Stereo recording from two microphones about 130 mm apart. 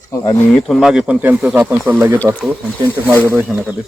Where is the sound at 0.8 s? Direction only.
5° right (ahead or behind).